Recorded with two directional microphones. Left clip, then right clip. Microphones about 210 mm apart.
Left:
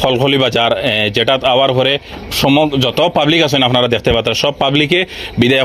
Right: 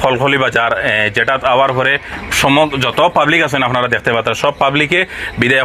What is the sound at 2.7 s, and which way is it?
A man's voice, 65° left (ahead or behind).